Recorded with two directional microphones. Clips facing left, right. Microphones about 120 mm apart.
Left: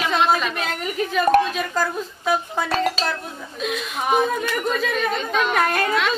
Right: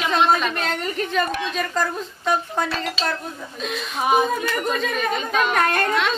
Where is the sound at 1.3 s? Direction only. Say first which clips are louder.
Left 11 dB; 45° left (ahead or behind).